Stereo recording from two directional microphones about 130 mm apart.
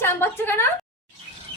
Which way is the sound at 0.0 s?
20° left (ahead or behind).